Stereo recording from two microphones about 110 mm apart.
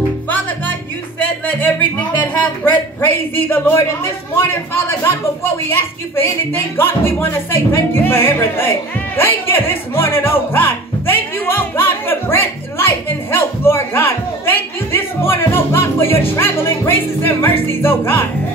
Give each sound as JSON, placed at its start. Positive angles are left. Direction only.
{"t": 1.2, "sound": "speech", "side_deg": 15}